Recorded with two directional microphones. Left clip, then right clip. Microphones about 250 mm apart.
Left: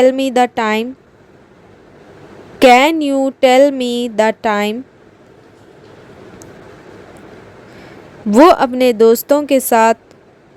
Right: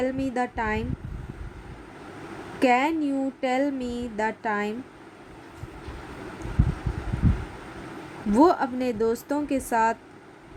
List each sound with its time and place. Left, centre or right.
0.0 s speech: left
2.6 s speech: left
8.3 s speech: left